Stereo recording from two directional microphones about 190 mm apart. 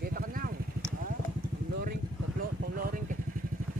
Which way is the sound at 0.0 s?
50° right (ahead or behind).